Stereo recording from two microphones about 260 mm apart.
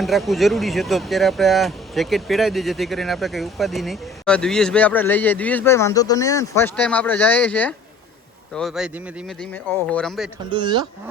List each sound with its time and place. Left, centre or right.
0.0 s speech: centre
10.5 s speech: centre